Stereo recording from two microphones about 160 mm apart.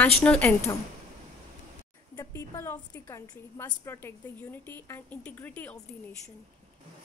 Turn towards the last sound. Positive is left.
turn(degrees=10)  # may be behind; listen again after turning